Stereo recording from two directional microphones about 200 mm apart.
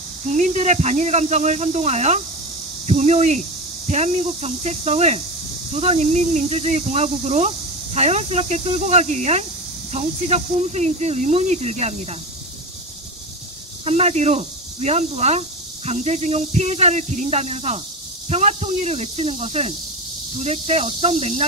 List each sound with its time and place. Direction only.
0.3 s speech: 35° right (ahead or behind)
13.8 s speech: 35° right (ahead or behind)